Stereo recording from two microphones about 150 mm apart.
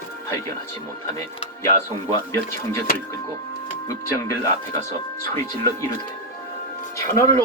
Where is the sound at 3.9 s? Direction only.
20° left (ahead or behind).